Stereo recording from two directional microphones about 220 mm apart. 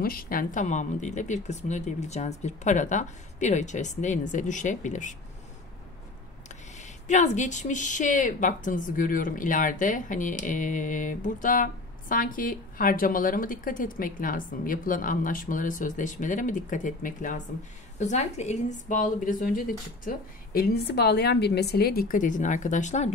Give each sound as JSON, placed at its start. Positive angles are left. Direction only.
{"t": 0.0, "sound": "speech", "side_deg": 40}
{"t": 6.8, "sound": "a woman's voice", "side_deg": 35}